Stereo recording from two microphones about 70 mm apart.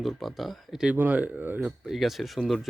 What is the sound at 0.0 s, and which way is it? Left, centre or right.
Speech, centre.